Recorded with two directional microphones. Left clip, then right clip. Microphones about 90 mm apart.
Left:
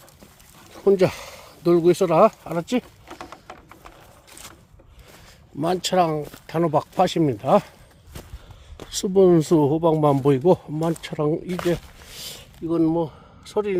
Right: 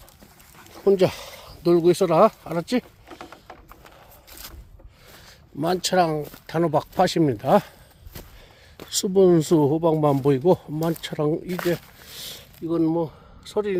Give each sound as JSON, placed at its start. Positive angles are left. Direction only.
{"t": 0.8, "sound": "speech", "side_deg": -20}
{"t": 5.5, "sound": "speech", "side_deg": -20}
{"t": 6.9, "sound": "speech", "side_deg": -35}
{"t": 8.8, "sound": "a sound", "side_deg": -25}
{"t": 9.0, "sound": "speech", "side_deg": -10}
{"t": 10.9, "sound": "speech", "side_deg": -20}
{"t": 11.7, "sound": "a sound", "side_deg": 0}